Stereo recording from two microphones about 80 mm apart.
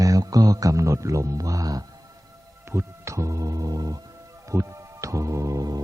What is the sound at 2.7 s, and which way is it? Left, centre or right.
Speech, right.